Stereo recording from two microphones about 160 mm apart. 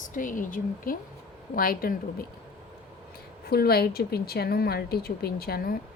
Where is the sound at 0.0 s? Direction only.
55° left (ahead or behind).